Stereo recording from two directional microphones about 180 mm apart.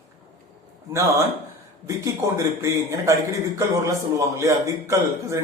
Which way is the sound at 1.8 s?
15° right (ahead or behind).